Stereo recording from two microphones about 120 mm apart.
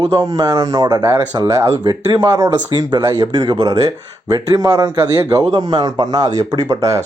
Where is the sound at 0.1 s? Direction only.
25° right (ahead or behind).